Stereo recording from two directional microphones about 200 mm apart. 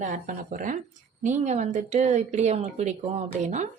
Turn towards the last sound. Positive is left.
turn(degrees=-35)  # may be behind; listen again after turning